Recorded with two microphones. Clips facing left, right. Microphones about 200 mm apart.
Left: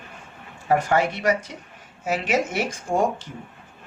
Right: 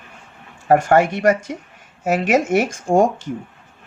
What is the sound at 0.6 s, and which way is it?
Speech, 50° right (ahead or behind).